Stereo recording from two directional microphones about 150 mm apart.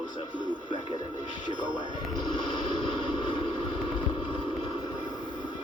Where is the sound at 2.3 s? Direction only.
35° left (ahead or behind).